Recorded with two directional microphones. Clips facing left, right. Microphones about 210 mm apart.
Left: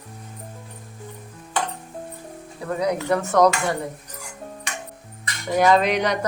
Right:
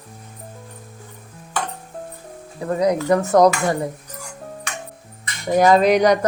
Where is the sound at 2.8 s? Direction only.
40° right (ahead or behind).